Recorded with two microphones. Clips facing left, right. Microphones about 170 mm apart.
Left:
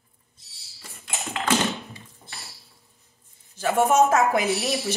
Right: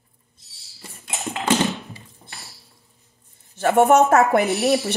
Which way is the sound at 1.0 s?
20° right (ahead or behind).